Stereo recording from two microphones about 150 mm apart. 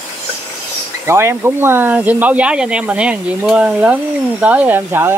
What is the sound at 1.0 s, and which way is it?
Speech, 15° right (ahead or behind).